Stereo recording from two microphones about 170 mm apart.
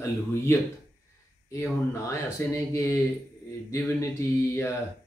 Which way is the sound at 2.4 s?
15° left (ahead or behind).